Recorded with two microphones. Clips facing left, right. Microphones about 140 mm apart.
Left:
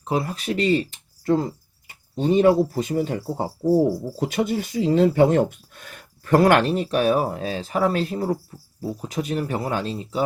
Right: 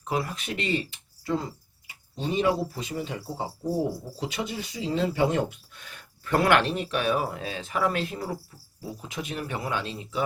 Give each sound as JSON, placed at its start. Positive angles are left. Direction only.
{"t": 0.0, "sound": "speech", "side_deg": 30}